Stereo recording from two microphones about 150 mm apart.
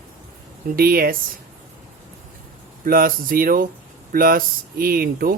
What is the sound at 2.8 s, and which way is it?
Speech, 75° right (ahead or behind).